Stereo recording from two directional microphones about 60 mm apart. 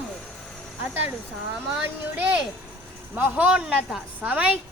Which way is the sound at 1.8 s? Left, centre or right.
Right.